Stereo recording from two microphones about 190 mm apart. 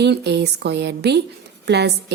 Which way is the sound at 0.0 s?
60° right (ahead or behind).